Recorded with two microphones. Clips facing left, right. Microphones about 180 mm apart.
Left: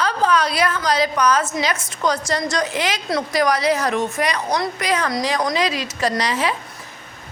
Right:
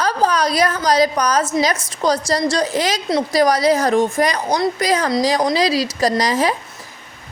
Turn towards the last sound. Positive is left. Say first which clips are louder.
# right 4 dB
turn(degrees=-40)  # may be behind; listen again after turning